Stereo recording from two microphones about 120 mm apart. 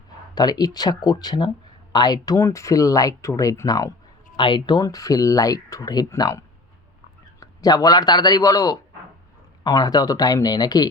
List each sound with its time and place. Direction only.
0.3 s speech: 35° left (ahead or behind)
4.4 s speech: 40° left (ahead or behind)